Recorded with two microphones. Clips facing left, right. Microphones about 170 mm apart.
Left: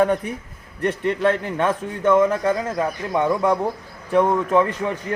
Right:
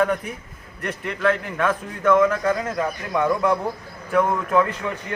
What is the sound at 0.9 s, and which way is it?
A man's voice, 30° left (ahead or behind).